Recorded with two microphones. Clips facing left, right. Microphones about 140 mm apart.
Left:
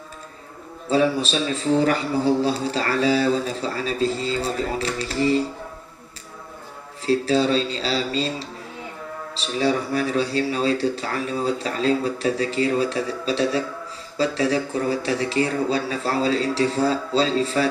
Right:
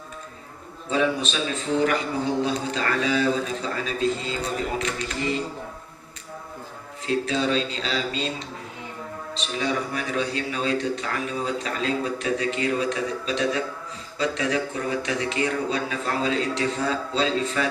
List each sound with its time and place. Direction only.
0.9 s a man's voice: 35° left (ahead or behind)
7.0 s a man's voice: 35° left (ahead or behind)